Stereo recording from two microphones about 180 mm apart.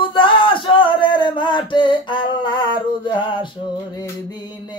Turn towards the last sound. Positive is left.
turn(degrees=25)  # may be behind; listen again after turning